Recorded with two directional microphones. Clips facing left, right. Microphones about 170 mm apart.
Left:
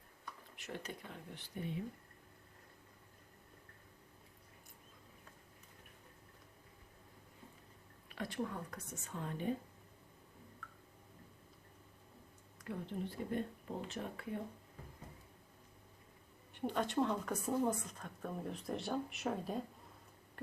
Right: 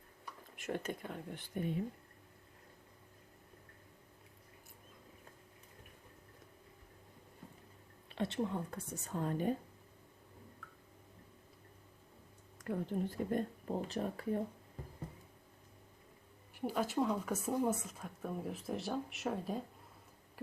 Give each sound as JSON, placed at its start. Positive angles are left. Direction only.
{"t": 0.5, "sound": "speech", "side_deg": -50}
{"t": 8.1, "sound": "speech", "side_deg": -25}
{"t": 12.5, "sound": "a woman's voice", "side_deg": -45}
{"t": 16.6, "sound": "speech", "side_deg": -5}